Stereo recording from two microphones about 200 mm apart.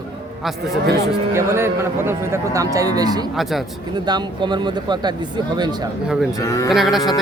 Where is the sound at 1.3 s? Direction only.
15° right (ahead or behind).